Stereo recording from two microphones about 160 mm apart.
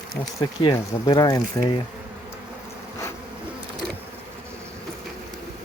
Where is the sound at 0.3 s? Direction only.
25° left (ahead or behind).